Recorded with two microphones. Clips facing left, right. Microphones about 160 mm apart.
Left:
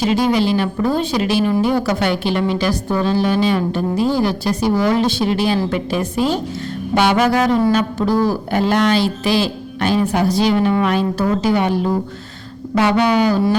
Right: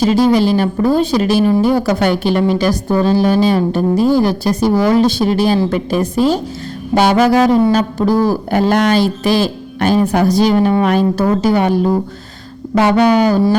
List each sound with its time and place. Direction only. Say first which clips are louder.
0.0 s a woman's voice: right 4 dB; 40° right (ahead or behind)